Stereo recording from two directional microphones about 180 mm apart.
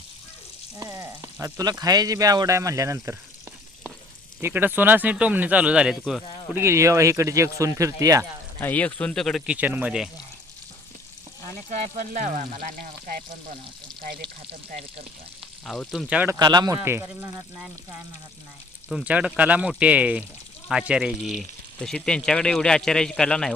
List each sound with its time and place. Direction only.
0.8 s frying: 15° right (ahead or behind)
1.8 s speech: 20° right (ahead or behind)
4.4 s speech: 10° right (ahead or behind)
6.5 s speech: 15° right (ahead or behind)
8.6 s speech: 10° left (ahead or behind)
11.7 s frying: 40° right (ahead or behind)
15.6 s speech: centre (ahead or behind)
16.4 s speech: 25° right (ahead or behind)
18.9 s speech: 5° right (ahead or behind)